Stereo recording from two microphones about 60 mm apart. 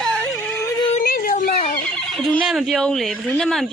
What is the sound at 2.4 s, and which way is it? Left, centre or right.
Speech, centre.